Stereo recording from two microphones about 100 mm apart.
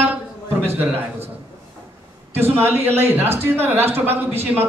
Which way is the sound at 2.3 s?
25° right (ahead or behind).